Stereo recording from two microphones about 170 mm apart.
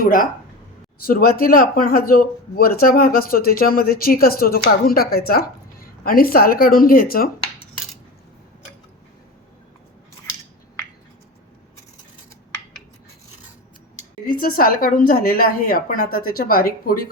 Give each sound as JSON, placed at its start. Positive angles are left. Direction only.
{"t": 0.0, "sound": "speech", "side_deg": 55}
{"t": 14.3, "sound": "speech", "side_deg": 60}